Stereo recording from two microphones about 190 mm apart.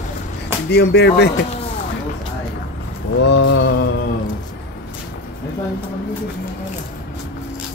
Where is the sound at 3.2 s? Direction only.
65° left (ahead or behind).